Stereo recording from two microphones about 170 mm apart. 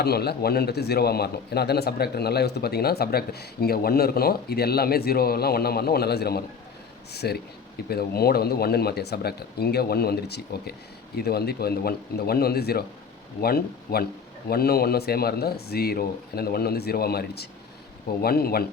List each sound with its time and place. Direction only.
0.0 s a man's voice: 70° left (ahead or behind)